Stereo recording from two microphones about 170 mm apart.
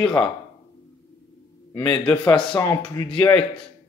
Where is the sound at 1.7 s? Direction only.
20° left (ahead or behind).